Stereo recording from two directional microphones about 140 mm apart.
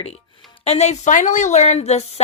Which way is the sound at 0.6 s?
50° left (ahead or behind).